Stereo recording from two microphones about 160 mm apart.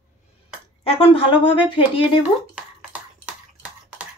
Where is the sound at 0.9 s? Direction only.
35° left (ahead or behind).